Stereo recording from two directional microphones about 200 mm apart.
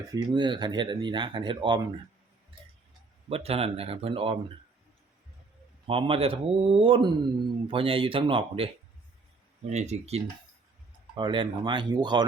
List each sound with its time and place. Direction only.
0.1 s speech: 20° right (ahead or behind)
3.2 s speech: 30° right (ahead or behind)
5.9 s speech: 25° right (ahead or behind)
11.1 s speech: 25° right (ahead or behind)